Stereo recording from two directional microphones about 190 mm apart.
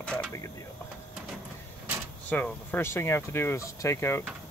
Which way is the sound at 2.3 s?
10° left (ahead or behind).